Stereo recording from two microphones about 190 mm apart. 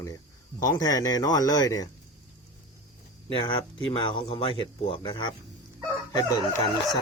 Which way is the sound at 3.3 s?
25° left (ahead or behind).